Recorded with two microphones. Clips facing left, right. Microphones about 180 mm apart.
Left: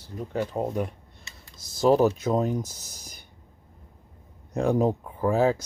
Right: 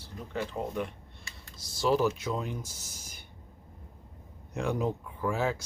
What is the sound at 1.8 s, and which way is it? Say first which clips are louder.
Speech: left 7 dB; 45° left (ahead or behind).